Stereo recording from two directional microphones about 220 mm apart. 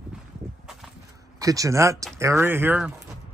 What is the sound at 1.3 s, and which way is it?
Speech, 15° right (ahead or behind).